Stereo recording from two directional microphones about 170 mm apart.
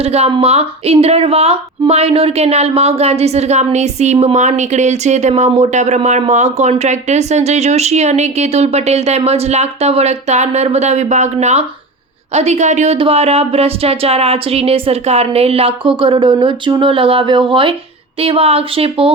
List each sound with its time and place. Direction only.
0.0 s a woman's voice: 35° right (ahead or behind)